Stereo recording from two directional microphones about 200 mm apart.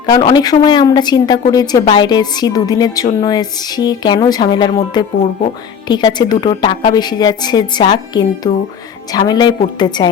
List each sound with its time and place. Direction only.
0.0 s music: 20° left (ahead or behind)